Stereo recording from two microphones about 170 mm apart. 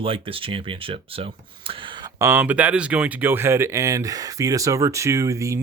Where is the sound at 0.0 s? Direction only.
30° right (ahead or behind).